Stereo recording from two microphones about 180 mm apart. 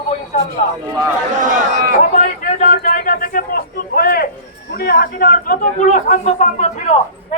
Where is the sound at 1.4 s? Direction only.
45° right (ahead or behind).